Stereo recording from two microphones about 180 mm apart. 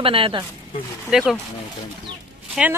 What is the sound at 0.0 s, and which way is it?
Speech, 30° right (ahead or behind).